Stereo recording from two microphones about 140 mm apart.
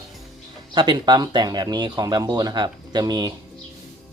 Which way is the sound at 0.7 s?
35° right (ahead or behind).